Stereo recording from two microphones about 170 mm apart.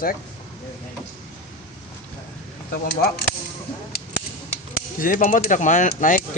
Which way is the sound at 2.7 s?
60° left (ahead or behind).